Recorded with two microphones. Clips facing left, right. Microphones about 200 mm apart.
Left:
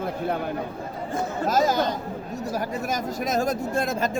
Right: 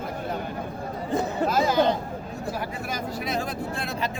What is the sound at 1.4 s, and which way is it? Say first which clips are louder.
Chatter: even; 40° left (ahead or behind).